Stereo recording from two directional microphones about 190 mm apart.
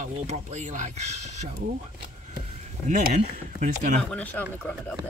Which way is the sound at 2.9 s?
40° right (ahead or behind).